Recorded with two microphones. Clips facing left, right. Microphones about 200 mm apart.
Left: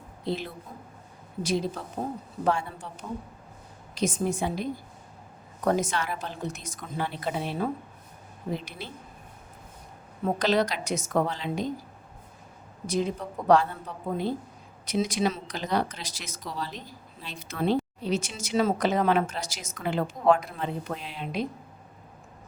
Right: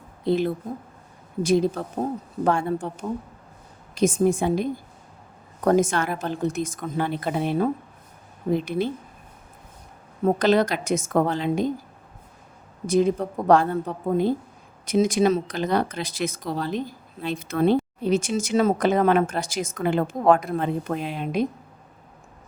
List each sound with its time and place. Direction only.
0.3 s speech: 50° right (ahead or behind)
3.9 s speech: 50° right (ahead or behind)
10.2 s speech: 50° right (ahead or behind)
12.9 s speech: 50° right (ahead or behind)